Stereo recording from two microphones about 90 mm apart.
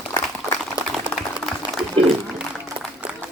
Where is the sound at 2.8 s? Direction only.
90° right.